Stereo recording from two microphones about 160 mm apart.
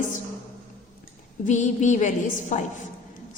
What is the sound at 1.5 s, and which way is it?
A woman's voice, 50° left (ahead or behind).